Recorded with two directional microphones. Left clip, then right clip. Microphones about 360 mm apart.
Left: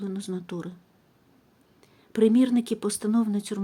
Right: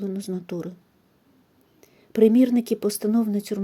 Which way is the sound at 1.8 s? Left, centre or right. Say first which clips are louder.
Right 4 dB; centre.